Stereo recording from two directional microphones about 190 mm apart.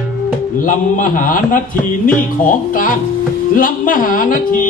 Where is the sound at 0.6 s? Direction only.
45° left (ahead or behind).